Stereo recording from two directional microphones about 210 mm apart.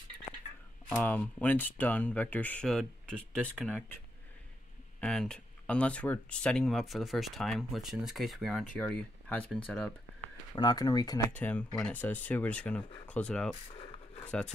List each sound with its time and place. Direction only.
0.8 s speech: 10° left (ahead or behind)
5.0 s speech: 5° left (ahead or behind)
10.5 s speech: 20° left (ahead or behind)
11.3 s speech: 5° left (ahead or behind)